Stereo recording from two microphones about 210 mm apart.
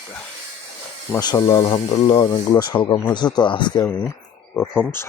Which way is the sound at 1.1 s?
15° left (ahead or behind).